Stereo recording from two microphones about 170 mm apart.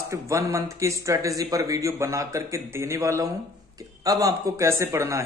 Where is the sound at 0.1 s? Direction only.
15° right (ahead or behind).